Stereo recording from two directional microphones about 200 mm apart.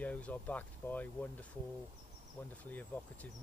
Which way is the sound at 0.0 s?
5° left (ahead or behind).